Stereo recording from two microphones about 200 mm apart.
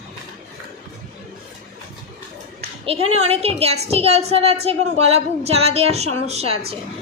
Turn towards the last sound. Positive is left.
turn(degrees=-30)  # may be behind; listen again after turning